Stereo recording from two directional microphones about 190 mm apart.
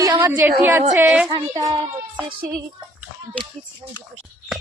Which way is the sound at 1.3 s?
20° right (ahead or behind).